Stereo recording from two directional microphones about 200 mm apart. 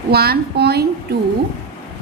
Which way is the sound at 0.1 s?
50° right (ahead or behind).